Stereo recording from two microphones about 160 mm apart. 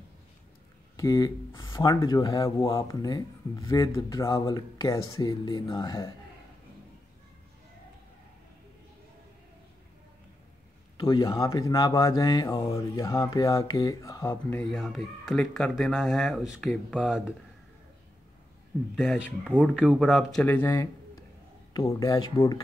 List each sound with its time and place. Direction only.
0.9 s speech: 20° left (ahead or behind)
11.0 s speech: 25° left (ahead or behind)
14.6 s speech: centre (ahead or behind)
18.9 s speech: centre (ahead or behind)
19.2 s speech: 10° right (ahead or behind); by 22.6 s 25° left (ahead or behind)